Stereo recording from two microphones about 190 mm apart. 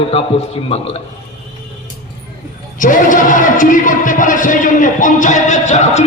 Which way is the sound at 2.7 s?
45° left (ahead or behind).